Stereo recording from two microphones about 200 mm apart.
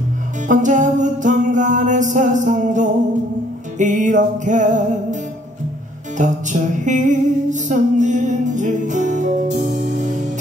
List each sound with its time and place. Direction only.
0.5 s music: 40° right (ahead or behind)
6.1 s music: 40° right (ahead or behind)